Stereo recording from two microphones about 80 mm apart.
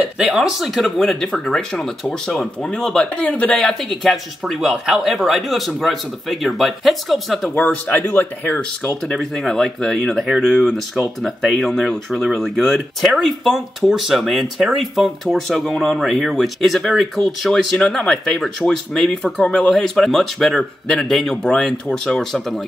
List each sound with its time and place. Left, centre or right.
0.2 s speech: centre
3.5 s speech: centre
7.9 s speech: left
9.1 s speech: centre
19.4 s speech: centre
19.7 s speech: centre